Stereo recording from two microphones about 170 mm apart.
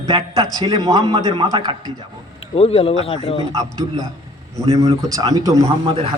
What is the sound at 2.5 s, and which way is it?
Speech, 35° left (ahead or behind).